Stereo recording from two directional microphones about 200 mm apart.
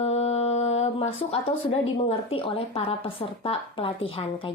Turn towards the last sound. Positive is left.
turn(degrees=25)  # may be behind; listen again after turning